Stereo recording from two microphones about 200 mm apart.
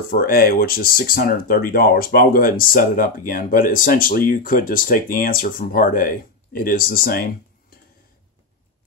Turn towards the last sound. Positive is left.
turn(degrees=45)  # may be behind; listen again after turning